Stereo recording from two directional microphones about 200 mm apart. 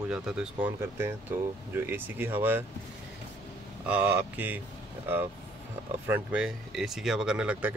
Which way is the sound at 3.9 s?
10° right (ahead or behind).